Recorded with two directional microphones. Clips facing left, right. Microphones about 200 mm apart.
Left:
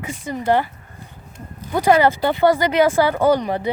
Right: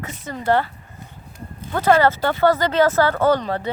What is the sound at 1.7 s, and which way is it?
Speech, 10° left (ahead or behind).